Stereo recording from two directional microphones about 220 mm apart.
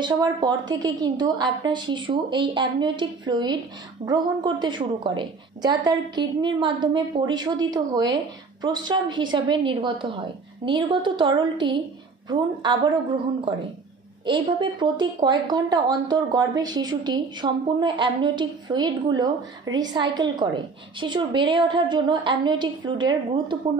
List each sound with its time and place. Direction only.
0.0 s a woman's voice: 20° right (ahead or behind)